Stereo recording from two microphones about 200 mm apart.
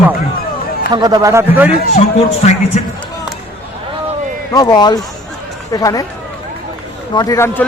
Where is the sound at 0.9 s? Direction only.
20° right (ahead or behind).